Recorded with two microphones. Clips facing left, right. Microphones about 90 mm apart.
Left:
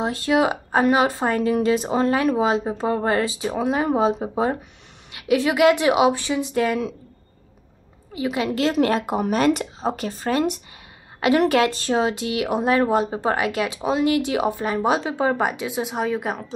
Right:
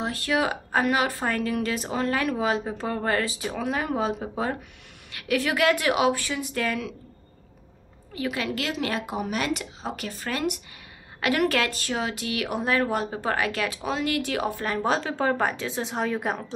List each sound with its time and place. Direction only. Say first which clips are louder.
0.0 s speech: left 6 dB; 25° left (ahead or behind)
8.1 s a woman's voice: left 5 dB; 20° left (ahead or behind)
8.5 s speech: left 8 dB; 30° left (ahead or behind)
8.7 s speech: left 8 dB; 45° left (ahead or behind); by 16.5 s centre (ahead or behind)